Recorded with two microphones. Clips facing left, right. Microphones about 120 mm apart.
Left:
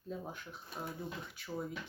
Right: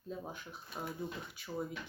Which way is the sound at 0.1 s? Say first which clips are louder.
Even; centre (ahead or behind).